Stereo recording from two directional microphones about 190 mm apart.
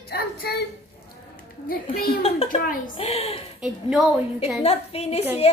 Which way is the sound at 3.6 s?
5° right (ahead or behind).